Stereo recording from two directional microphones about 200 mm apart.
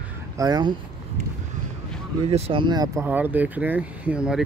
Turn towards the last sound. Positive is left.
turn(degrees=-5)  # may be behind; listen again after turning